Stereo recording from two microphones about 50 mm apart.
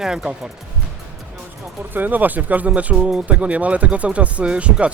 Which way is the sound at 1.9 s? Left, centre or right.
Right.